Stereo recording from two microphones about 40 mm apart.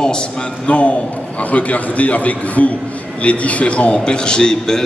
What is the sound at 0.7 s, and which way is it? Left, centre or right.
A man's voice, left.